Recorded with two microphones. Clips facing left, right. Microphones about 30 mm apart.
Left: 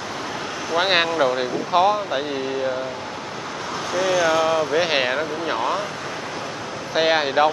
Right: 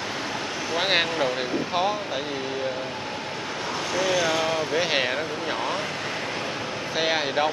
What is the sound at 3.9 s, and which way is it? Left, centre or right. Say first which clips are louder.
Speech: left 5 dB; centre.